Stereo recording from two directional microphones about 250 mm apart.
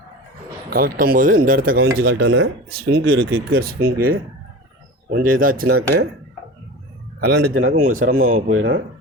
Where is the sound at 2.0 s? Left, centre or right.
Right.